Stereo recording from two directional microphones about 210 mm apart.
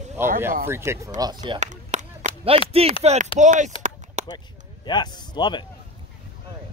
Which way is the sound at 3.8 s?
30° right (ahead or behind).